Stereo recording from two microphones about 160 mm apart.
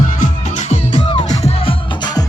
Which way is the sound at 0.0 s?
55° left (ahead or behind).